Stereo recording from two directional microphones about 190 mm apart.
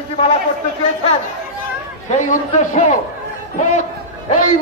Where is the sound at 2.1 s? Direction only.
40° left (ahead or behind).